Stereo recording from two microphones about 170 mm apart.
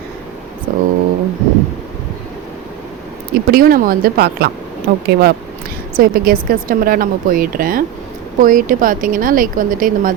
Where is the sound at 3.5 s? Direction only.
60° right (ahead or behind).